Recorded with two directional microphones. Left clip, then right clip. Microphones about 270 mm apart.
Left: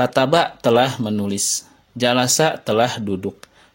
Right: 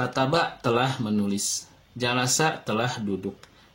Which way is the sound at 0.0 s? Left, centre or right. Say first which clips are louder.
Left 8 dB; left.